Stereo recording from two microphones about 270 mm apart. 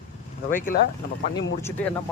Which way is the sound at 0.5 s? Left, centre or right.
Left.